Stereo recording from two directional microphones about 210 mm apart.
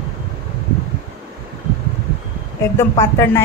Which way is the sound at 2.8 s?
10° left (ahead or behind).